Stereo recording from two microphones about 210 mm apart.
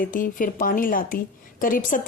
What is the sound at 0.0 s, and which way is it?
A woman's voice, 40° left (ahead or behind).